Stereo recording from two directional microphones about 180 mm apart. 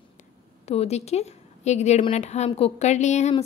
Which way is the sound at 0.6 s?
35° left (ahead or behind).